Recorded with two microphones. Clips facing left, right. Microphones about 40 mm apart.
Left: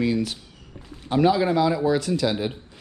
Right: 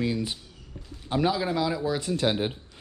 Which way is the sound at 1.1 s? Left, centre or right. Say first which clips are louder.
Left 6 dB; centre.